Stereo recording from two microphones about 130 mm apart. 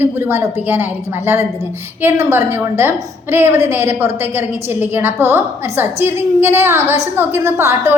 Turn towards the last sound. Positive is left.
turn(degrees=-20)  # may be behind; listen again after turning